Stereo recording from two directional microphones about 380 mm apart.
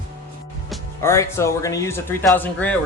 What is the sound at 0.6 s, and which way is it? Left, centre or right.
Speech, centre.